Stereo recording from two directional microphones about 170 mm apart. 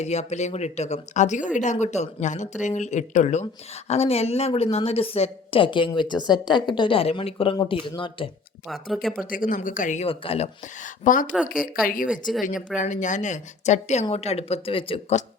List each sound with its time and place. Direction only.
0.0 s a woman's voice: 40° left (ahead or behind)
8.6 s speech: centre (ahead or behind)
9.3 s speech: 55° left (ahead or behind)
10.1 s a woman's voice: 35° left (ahead or behind)